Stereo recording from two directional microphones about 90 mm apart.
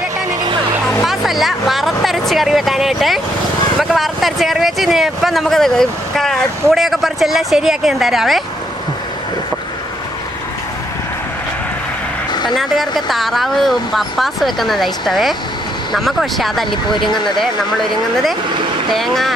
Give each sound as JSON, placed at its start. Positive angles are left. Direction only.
{"t": 1.0, "sound": "speech", "side_deg": 0}
{"t": 12.3, "sound": "vehicle", "side_deg": 55}
{"t": 12.5, "sound": "speech", "side_deg": 0}
{"t": 16.9, "sound": "speech", "side_deg": 60}
{"t": 17.4, "sound": "speech", "side_deg": 5}